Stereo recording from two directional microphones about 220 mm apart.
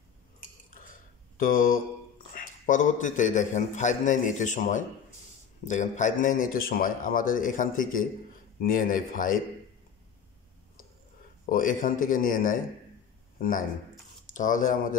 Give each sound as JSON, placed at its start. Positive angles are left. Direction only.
{"t": 1.4, "sound": "a man's voice", "side_deg": 40}
{"t": 11.4, "sound": "a man's voice", "side_deg": 40}